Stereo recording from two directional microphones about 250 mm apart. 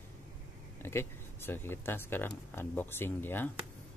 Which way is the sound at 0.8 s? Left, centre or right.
Centre.